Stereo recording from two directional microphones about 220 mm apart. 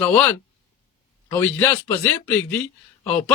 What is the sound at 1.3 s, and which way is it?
Speech, 10° left (ahead or behind).